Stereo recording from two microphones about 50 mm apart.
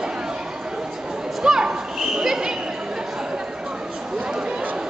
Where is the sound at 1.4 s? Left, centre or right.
Centre.